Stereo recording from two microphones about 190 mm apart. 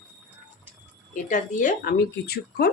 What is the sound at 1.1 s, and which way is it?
Speech, 40° left (ahead or behind).